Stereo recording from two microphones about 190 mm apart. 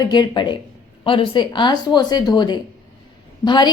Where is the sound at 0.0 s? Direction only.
20° left (ahead or behind).